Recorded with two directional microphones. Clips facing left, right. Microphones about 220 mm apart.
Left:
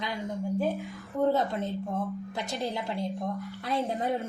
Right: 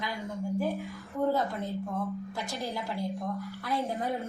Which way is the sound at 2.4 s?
20° left (ahead or behind).